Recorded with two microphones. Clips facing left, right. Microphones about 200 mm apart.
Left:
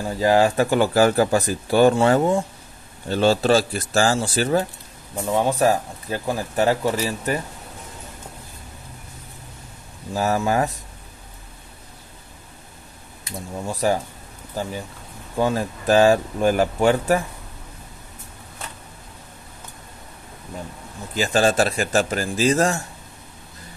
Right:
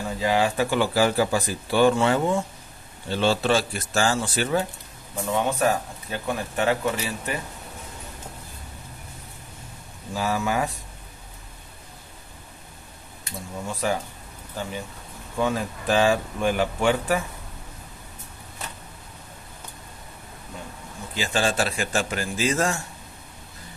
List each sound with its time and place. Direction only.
0.2 s speech: 40° left (ahead or behind)
10.1 s speech: 45° left (ahead or behind)
13.7 s speech: 40° left (ahead or behind)
15.3 s speech: 35° left (ahead or behind)
21.1 s speech: 45° left (ahead or behind)